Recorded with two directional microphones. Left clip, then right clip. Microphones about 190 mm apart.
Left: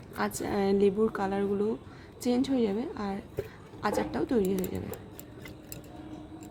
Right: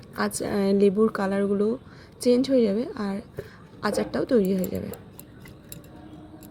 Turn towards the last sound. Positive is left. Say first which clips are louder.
# right 6 dB
turn(degrees=-25)  # may be behind; listen again after turning